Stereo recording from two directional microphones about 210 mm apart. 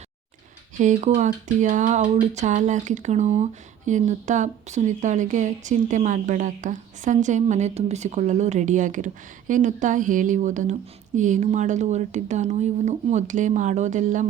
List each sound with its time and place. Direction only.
0.8 s speech: 35° right (ahead or behind)